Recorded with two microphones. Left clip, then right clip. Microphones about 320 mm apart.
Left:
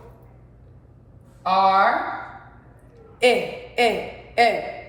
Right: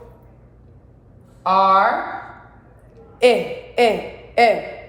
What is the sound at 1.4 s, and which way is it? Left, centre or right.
Speech, centre.